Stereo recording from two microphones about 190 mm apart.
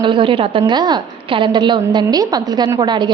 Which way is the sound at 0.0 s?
25° right (ahead or behind).